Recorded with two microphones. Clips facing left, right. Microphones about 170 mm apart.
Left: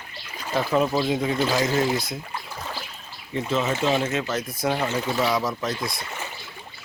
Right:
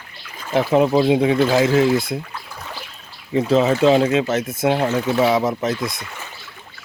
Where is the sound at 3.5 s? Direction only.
35° right (ahead or behind).